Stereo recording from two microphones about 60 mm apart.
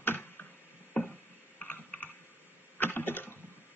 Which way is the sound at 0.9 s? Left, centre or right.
Centre.